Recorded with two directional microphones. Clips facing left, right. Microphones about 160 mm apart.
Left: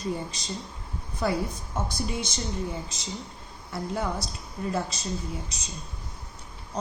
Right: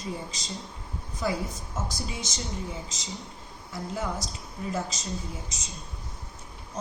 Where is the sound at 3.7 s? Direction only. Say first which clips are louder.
Left 2 dB; 60° left (ahead or behind).